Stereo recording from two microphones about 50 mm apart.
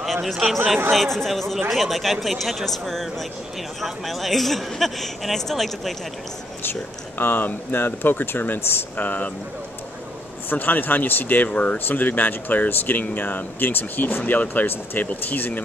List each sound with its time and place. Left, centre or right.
0.0 s a sound: centre
0.9 s speech: centre
6.6 s speech: left
8.9 s speech: left
10.5 s speech: left